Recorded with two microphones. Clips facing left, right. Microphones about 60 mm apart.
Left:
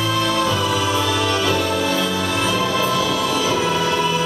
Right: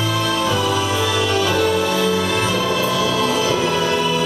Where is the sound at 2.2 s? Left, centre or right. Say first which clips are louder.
Right 1 dB; right.